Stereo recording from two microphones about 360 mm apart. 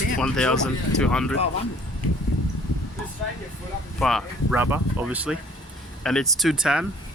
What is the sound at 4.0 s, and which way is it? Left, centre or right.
Speech, centre.